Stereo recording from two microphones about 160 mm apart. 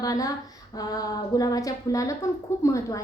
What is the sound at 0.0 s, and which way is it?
A woman's voice, 20° left (ahead or behind).